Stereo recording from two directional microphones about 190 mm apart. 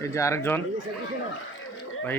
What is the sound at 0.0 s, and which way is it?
Speech, 15° left (ahead or behind).